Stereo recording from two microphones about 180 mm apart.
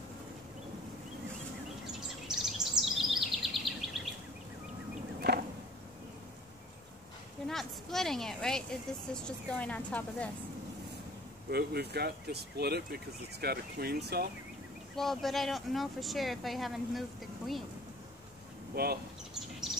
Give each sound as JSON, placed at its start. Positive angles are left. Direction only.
{"t": 1.9, "sound": "bird vocalization", "side_deg": -5}
{"t": 5.3, "sound": "a sound", "side_deg": -65}
{"t": 7.4, "sound": "speech", "side_deg": 0}
{"t": 11.5, "sound": "speech", "side_deg": -65}
{"t": 15.0, "sound": "speech", "side_deg": 0}
{"t": 18.8, "sound": "speech", "side_deg": -65}